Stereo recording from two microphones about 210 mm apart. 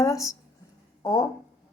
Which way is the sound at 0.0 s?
15° left (ahead or behind).